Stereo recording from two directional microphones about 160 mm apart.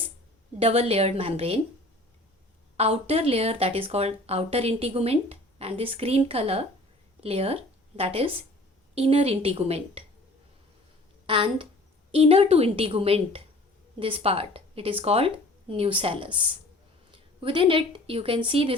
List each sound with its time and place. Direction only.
0.6 s speech: 40° right (ahead or behind)
2.7 s speech: 40° right (ahead or behind)
11.3 s a woman's voice: 35° right (ahead or behind)